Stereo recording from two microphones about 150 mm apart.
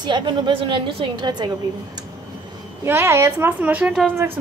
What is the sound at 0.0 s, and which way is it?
A woman's voice, 30° right (ahead or behind).